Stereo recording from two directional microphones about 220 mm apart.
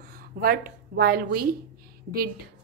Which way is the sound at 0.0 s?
40° right (ahead or behind).